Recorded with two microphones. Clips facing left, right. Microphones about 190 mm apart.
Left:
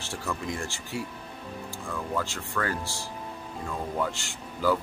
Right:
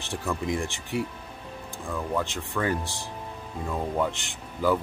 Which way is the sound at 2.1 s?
20° right (ahead or behind).